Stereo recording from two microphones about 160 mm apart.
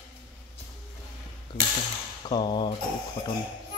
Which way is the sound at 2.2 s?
30° left (ahead or behind).